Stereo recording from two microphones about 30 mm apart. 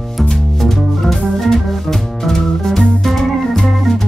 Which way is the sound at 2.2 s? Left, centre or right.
Centre.